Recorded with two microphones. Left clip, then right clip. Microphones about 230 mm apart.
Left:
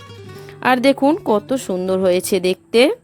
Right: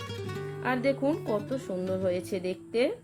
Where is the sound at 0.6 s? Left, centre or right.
Left.